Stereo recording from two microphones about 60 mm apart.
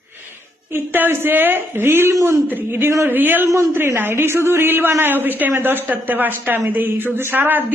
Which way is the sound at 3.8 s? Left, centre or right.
Right.